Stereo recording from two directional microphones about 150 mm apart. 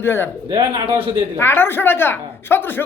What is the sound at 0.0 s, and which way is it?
Speech, 15° left (ahead or behind).